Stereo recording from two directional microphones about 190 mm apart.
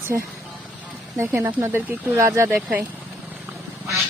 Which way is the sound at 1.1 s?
15° right (ahead or behind).